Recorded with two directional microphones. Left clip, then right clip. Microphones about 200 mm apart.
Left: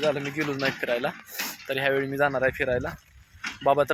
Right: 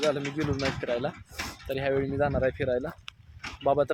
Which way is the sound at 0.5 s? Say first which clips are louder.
Left 4 dB; 20° right (ahead or behind).